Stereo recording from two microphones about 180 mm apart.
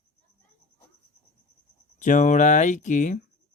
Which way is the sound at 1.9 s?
45° left (ahead or behind).